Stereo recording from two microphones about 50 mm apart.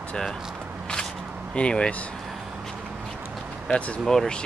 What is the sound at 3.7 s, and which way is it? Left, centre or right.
Speech, left.